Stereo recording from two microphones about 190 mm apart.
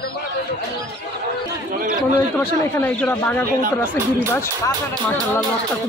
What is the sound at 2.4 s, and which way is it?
Speech, 10° left (ahead or behind).